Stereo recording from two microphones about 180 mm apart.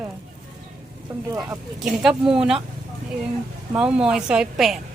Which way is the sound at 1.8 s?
Centre (ahead or behind).